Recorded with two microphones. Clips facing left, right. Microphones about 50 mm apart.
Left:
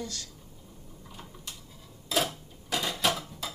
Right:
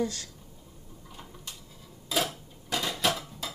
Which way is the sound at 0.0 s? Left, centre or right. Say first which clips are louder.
Right 8 dB; right.